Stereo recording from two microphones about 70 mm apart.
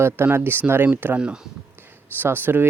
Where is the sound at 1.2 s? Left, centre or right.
Centre.